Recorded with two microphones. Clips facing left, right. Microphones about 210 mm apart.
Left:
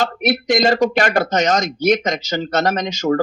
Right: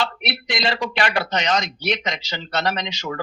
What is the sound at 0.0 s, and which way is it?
A woman's voice, 45° left (ahead or behind).